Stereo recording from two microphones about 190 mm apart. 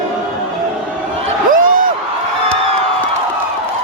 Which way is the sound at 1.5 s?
45° right (ahead or behind).